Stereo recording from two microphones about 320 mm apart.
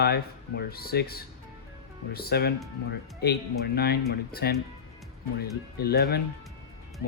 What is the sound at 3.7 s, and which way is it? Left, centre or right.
Speech, left.